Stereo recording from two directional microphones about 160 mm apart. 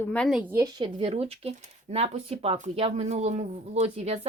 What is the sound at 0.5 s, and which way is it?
Speech, 25° right (ahead or behind).